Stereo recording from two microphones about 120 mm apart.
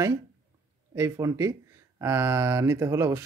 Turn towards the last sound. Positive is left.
turn(degrees=-25)  # may be behind; listen again after turning